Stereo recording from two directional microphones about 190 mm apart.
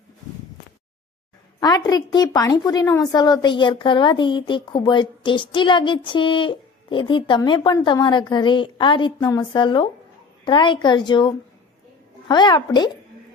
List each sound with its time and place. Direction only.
1.6 s a woman's voice: 20° left (ahead or behind)